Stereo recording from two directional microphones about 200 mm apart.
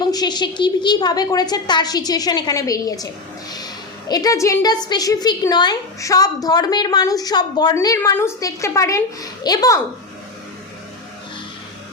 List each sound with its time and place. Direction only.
0.0 s a woman's voice: 20° left (ahead or behind)
4.1 s a woman's voice: 20° left (ahead or behind)